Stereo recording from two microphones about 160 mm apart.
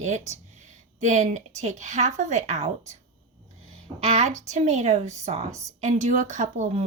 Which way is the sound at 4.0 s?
45° right (ahead or behind).